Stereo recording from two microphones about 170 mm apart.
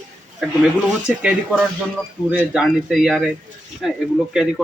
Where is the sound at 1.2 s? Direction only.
5° right (ahead or behind).